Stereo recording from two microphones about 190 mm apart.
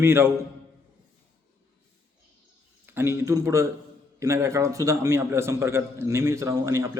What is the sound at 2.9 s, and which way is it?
A man's voice, 15° right (ahead or behind).